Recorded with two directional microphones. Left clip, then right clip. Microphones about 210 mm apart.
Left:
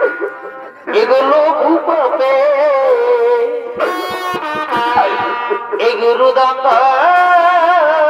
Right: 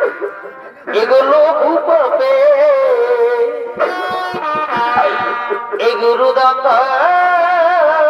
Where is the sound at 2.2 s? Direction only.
15° left (ahead or behind).